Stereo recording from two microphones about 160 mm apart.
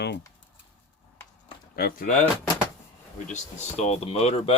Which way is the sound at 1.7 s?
65° left (ahead or behind).